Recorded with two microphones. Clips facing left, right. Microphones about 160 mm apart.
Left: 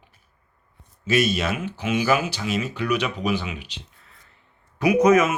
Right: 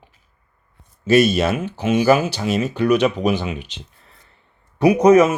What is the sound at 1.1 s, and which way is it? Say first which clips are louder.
Speech: right 7 dB; 30° right (ahead or behind).